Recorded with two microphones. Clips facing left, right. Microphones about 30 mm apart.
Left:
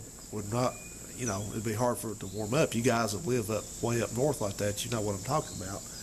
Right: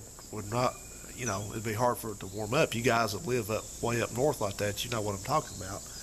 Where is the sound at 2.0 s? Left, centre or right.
Centre.